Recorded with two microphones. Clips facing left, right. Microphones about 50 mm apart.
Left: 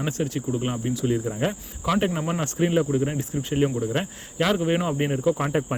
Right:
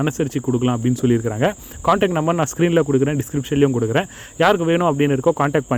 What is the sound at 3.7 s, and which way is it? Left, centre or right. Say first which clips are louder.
Speech: right 7 dB; right.